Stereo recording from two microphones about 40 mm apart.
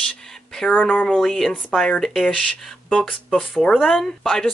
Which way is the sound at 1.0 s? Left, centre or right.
Centre.